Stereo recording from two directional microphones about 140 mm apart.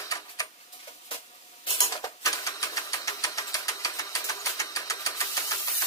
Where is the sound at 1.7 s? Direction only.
30° left (ahead or behind).